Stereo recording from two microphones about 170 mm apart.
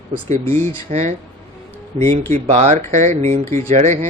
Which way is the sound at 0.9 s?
40° right (ahead or behind).